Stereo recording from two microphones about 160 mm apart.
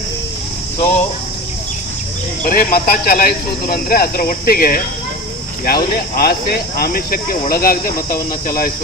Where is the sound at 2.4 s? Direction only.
55° left (ahead or behind).